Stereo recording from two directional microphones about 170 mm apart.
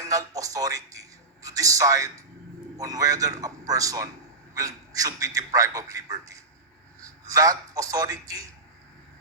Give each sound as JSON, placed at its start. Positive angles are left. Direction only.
{"t": 0.1, "sound": "a man's voice", "side_deg": -20}